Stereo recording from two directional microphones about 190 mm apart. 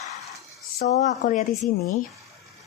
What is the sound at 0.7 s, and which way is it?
Speech, 40° left (ahead or behind).